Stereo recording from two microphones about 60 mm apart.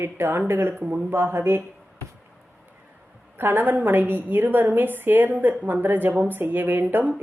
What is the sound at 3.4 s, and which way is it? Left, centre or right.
A woman's voice, right.